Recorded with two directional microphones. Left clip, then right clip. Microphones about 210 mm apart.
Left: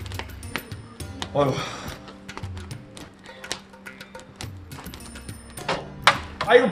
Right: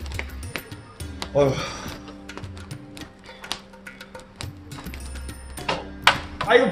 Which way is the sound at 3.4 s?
Centre (ahead or behind).